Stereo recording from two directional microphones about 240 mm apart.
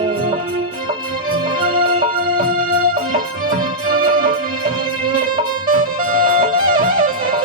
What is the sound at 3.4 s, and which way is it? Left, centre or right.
Music, right.